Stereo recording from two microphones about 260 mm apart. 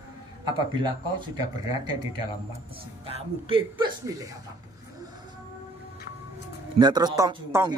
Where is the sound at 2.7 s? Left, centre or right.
Right.